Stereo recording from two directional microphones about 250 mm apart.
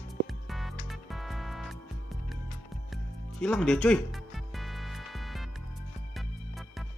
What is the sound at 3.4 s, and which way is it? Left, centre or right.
Music, centre.